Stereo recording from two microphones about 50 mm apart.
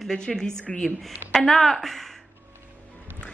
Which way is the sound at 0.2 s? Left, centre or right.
Centre.